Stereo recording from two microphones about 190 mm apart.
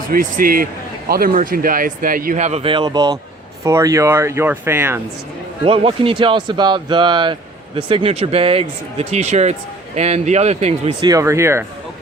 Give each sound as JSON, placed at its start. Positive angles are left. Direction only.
{"t": 0.1, "sound": "a man's voice", "side_deg": -45}
{"t": 5.6, "sound": "speech", "side_deg": -30}
{"t": 11.0, "sound": "speech", "side_deg": -15}